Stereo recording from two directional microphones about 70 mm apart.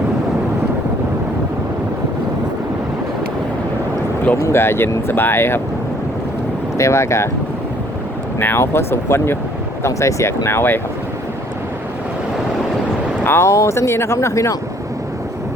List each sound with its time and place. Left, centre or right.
4.4 s speech: left
6.7 s speech: left
8.4 s speech: left
13.2 s speech: left